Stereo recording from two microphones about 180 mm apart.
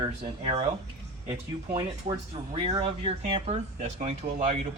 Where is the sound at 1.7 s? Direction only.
25° right (ahead or behind).